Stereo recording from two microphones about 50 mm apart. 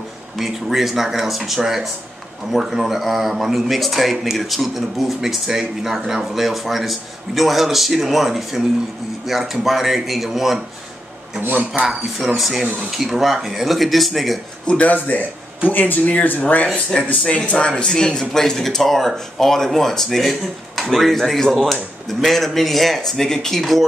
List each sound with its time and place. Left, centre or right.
0.4 s a man's voice: centre
11.4 s speech: right
12.4 s a man's voice: centre
14.7 s a man's voice: left; by 23.8 s centre